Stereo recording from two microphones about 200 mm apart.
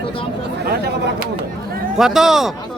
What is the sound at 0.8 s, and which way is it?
Speech, 55° right (ahead or behind).